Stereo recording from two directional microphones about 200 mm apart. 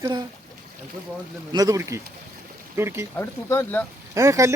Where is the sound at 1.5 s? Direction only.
15° right (ahead or behind).